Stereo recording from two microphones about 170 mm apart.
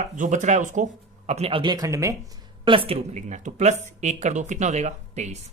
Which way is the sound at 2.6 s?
30° right (ahead or behind).